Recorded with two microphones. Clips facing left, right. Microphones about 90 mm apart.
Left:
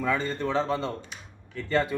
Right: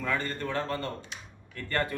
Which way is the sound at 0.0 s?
15° left (ahead or behind).